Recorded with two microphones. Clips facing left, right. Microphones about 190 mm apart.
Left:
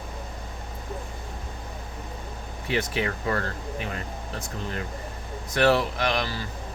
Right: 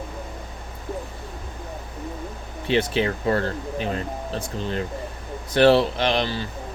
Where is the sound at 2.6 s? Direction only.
25° right (ahead or behind).